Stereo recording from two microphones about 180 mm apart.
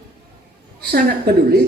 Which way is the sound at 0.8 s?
60° right (ahead or behind).